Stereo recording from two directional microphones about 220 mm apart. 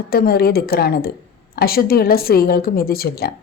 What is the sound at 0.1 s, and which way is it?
A woman's voice, 45° left (ahead or behind).